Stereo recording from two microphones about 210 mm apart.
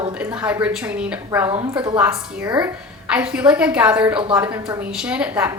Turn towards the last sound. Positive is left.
turn(degrees=-5)  # may be behind; listen again after turning